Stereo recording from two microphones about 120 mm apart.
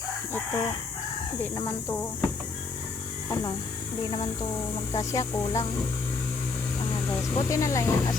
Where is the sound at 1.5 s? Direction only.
20° left (ahead or behind).